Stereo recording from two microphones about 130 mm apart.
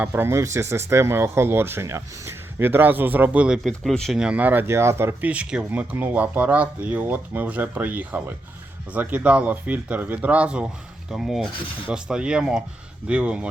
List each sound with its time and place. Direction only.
0.0 s speech: 15° right (ahead or behind)
3.7 s speech: 5° left (ahead or behind)